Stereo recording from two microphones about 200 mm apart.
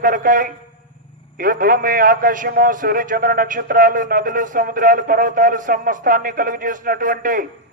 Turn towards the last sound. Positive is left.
turn(degrees=-40)  # may be behind; listen again after turning